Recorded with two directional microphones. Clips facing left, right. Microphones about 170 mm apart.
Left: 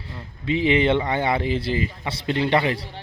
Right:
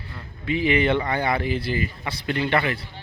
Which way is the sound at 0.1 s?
25° left (ahead or behind).